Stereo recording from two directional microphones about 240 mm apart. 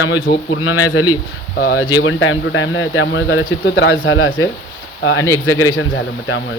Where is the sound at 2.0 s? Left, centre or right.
Left.